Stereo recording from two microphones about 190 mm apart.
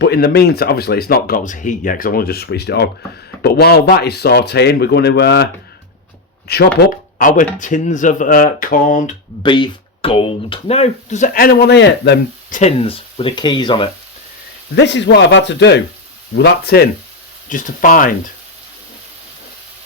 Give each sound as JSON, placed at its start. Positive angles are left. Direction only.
{"t": 0.0, "sound": "speech", "side_deg": 55}
{"t": 6.7, "sound": "speech", "side_deg": 45}
{"t": 9.4, "sound": "speech", "side_deg": 25}
{"t": 11.3, "sound": "speech", "side_deg": 55}
{"t": 12.5, "sound": "speech", "side_deg": 45}
{"t": 12.8, "sound": "speech", "side_deg": 30}
{"t": 14.8, "sound": "speech", "side_deg": 65}
{"t": 17.5, "sound": "speech", "side_deg": 45}